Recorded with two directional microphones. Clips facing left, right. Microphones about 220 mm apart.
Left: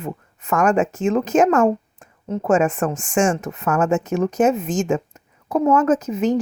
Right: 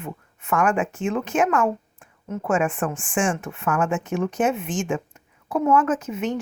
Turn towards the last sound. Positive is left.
turn(degrees=35)  # may be behind; listen again after turning